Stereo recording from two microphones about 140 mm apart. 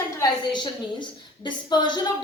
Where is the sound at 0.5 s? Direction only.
35° left (ahead or behind).